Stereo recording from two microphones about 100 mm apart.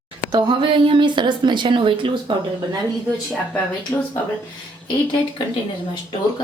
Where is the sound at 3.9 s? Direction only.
30° left (ahead or behind).